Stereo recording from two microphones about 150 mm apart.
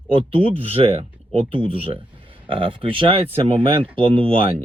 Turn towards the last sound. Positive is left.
turn(degrees=-35)  # may be behind; listen again after turning